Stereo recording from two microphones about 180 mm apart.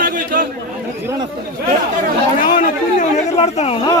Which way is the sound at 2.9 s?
40° left (ahead or behind).